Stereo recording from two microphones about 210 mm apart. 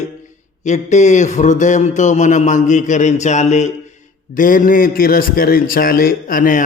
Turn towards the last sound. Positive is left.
turn(degrees=40)  # may be behind; listen again after turning